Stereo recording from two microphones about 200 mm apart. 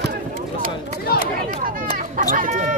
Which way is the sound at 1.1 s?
50° left (ahead or behind).